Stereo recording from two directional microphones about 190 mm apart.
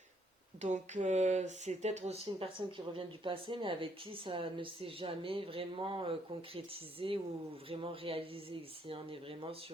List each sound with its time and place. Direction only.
0.6 s speech: 40° right (ahead or behind)